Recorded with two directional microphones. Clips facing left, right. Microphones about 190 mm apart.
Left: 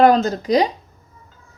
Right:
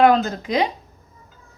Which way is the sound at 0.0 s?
40° left (ahead or behind).